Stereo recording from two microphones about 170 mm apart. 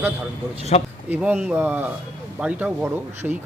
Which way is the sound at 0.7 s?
40° left (ahead or behind).